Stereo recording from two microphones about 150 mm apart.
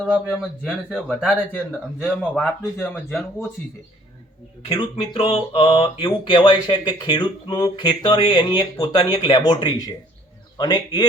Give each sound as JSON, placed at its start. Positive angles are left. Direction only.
{"t": 0.3, "sound": "speech", "side_deg": 0}
{"t": 4.7, "sound": "a man's voice", "side_deg": 35}